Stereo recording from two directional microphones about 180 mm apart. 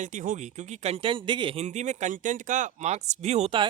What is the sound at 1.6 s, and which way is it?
Speech, 40° right (ahead or behind).